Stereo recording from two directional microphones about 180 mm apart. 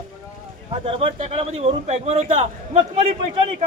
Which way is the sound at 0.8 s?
35° right (ahead or behind).